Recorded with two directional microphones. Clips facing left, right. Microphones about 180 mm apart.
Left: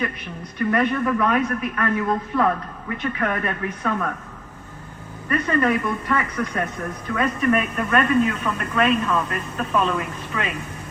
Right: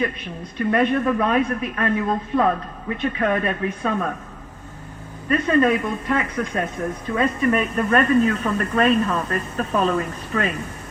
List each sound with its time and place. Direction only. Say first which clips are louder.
0.7 s a man's voice: right 2 dB; 25° right (ahead or behind)
5.3 s speech: right 3 dB; 25° right (ahead or behind); by 10.5 s 40° right (ahead or behind)